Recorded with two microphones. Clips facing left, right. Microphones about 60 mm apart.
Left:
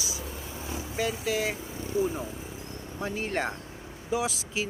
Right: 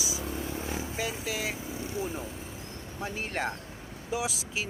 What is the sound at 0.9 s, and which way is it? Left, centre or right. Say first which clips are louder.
Speech: left 9 dB; centre.